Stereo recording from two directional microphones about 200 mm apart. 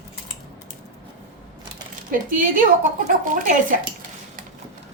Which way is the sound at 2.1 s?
45° right (ahead or behind).